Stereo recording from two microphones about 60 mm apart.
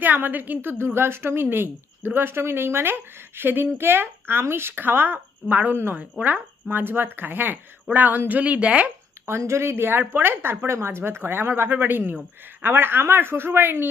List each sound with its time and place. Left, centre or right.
0.0 s a woman's voice: right
9.4 s a woman's voice: right